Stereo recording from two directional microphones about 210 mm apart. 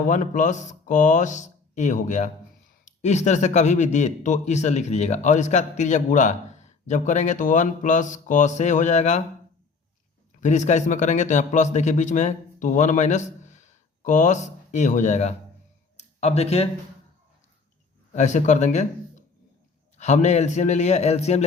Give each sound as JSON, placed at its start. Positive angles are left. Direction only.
{"t": 0.1, "sound": "speech", "side_deg": 35}
{"t": 10.4, "sound": "speech", "side_deg": 35}
{"t": 18.1, "sound": "speech", "side_deg": 35}